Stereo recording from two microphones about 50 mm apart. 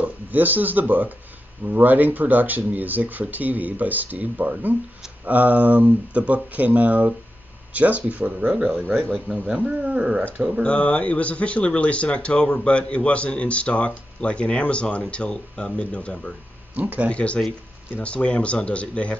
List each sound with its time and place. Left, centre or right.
0.0 s speech: right; by 10.2 s centre
10.6 s speech: left
16.7 s speech: right
17.1 s speech: left